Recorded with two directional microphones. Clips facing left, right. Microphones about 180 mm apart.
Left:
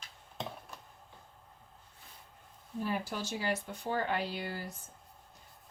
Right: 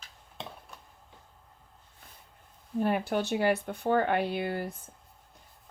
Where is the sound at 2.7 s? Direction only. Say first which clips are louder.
Right 8 dB; 65° right (ahead or behind).